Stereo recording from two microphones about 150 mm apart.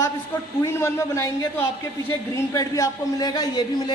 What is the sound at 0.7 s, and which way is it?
A man's voice, 15° left (ahead or behind).